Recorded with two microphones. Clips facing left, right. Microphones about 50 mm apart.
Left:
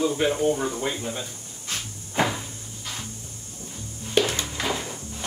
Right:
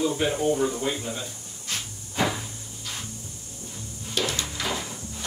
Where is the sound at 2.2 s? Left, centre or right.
Left.